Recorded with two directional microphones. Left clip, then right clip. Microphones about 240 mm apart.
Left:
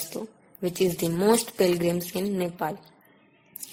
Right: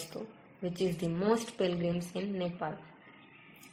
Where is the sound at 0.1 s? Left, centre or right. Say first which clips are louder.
Left 8 dB; left.